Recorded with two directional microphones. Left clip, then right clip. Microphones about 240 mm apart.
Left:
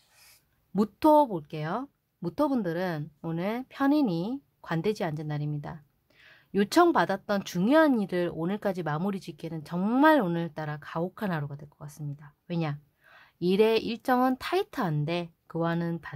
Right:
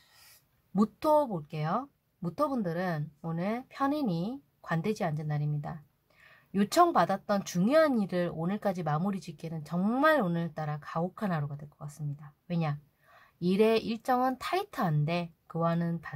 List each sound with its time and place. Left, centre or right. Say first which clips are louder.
0.7 s speech: left 5 dB; left